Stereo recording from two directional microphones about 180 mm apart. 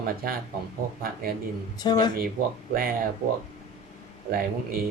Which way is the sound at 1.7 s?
25° left (ahead or behind).